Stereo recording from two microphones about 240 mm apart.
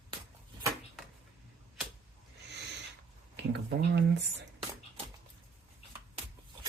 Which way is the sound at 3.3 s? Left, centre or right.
Right.